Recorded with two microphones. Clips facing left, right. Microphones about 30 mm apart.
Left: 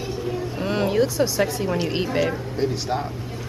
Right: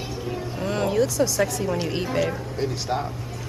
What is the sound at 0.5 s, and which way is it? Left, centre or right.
Speech, centre.